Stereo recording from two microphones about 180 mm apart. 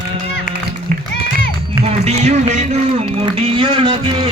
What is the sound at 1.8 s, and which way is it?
Music, 35° right (ahead or behind).